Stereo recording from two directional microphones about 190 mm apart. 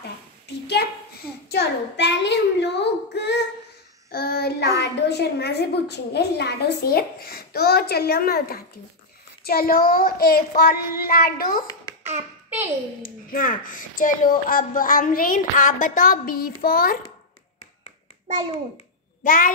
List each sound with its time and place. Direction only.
0.5 s a woman's voice: 60° left (ahead or behind)
4.1 s child singing: 55° left (ahead or behind)
4.7 s a woman's voice: 65° left (ahead or behind); by 11.6 s 50° left (ahead or behind)
13.0 s speech: 45° left (ahead or behind)
19.2 s speech: 45° left (ahead or behind)